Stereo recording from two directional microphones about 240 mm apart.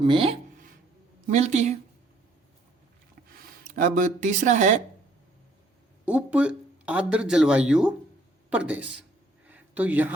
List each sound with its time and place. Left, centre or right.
0.0 s speech: right
3.6 s speech: right
6.1 s speech: centre
9.5 s a sound: centre